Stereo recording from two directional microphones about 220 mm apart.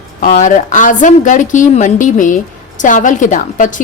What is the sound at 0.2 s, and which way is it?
A woman's voice, 35° left (ahead or behind).